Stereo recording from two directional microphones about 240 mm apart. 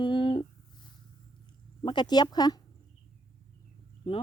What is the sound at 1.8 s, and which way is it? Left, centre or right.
Speech, centre.